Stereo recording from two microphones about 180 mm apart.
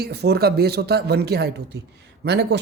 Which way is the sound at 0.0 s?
65° right (ahead or behind).